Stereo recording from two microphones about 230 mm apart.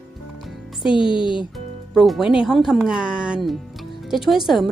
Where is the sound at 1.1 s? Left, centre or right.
Left.